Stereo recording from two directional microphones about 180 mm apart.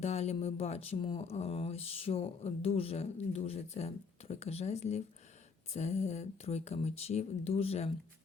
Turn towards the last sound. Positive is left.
turn(degrees=35)  # may be behind; listen again after turning